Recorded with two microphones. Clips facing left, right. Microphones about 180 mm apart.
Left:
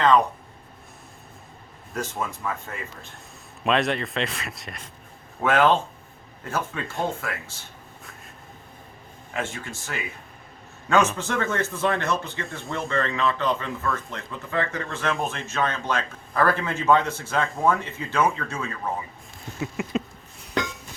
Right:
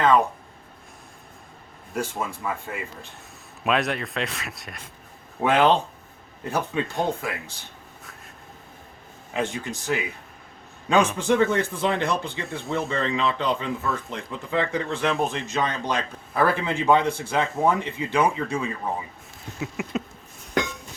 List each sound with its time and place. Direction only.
0.0 s a man's voice: 5° right (ahead or behind)
1.9 s a man's voice: 10° right (ahead or behind)
5.4 s a man's voice: 15° right (ahead or behind)
9.3 s a man's voice: 15° right (ahead or behind)
19.5 s a sound: 5° right (ahead or behind)